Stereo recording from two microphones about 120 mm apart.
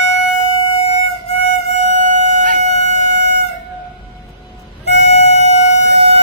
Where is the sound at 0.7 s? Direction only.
55° left (ahead or behind).